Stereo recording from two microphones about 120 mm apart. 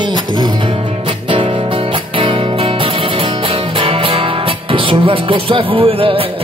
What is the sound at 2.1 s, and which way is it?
Music, 50° right (ahead or behind).